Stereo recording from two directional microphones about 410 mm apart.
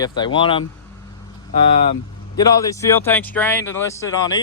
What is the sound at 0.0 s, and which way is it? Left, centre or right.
Speech, centre.